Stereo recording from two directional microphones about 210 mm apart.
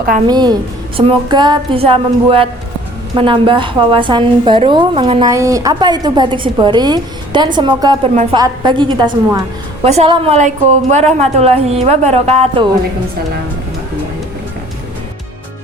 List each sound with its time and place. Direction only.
0.3 s a woman's voice: 20° right (ahead or behind)
8.1 s a woman's voice: 35° right (ahead or behind)
8.4 s a woman's voice: 20° right (ahead or behind)